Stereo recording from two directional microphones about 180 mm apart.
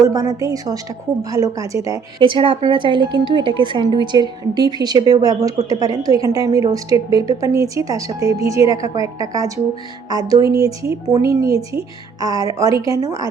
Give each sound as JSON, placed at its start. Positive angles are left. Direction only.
{"t": 0.0, "sound": "speech", "side_deg": -20}